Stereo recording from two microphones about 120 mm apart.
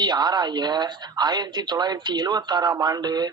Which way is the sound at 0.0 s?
35° right (ahead or behind).